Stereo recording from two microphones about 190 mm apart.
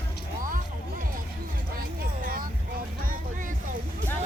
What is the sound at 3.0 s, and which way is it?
Music, 45° right (ahead or behind).